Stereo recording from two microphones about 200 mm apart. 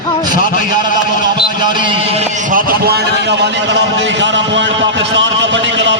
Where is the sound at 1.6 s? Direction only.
25° right (ahead or behind).